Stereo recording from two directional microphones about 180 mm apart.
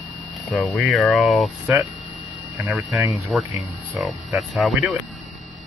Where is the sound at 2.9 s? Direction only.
15° right (ahead or behind).